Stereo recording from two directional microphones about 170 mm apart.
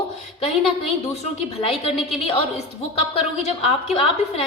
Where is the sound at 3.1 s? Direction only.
35° left (ahead or behind).